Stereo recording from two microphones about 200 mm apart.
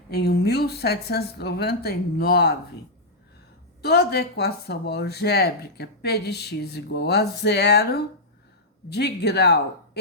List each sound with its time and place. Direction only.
0.1 s speech: 55° left (ahead or behind)
3.8 s speech: 55° left (ahead or behind)